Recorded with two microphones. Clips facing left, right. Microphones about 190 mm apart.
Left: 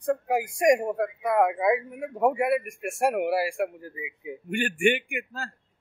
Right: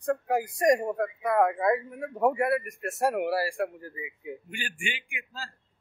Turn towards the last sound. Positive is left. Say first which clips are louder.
# left 7 dB
turn(degrees=60)  # may be behind; listen again after turning